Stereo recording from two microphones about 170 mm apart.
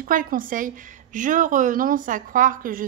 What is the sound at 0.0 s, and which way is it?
A woman's voice, 55° right (ahead or behind).